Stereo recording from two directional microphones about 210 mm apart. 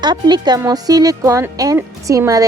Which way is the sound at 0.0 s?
20° right (ahead or behind).